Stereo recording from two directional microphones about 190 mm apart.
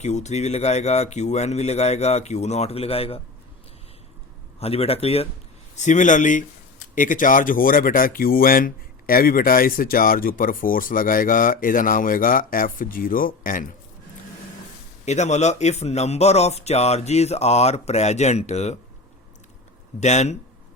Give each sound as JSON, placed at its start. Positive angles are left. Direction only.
{"t": 0.0, "sound": "speech", "side_deg": 35}
{"t": 4.6, "sound": "speech", "side_deg": 30}
{"t": 15.0, "sound": "speech", "side_deg": 35}
{"t": 20.0, "sound": "speech", "side_deg": 35}